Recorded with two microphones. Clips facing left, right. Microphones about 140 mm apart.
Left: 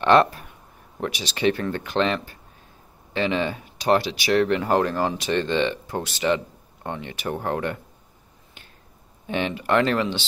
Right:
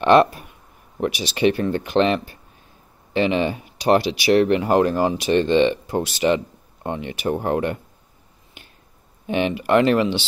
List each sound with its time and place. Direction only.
0.0 s speech: 15° right (ahead or behind)
9.3 s speech: 15° right (ahead or behind)